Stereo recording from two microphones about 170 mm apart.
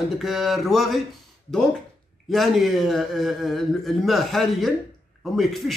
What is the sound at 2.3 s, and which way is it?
A man's voice, centre (ahead or behind).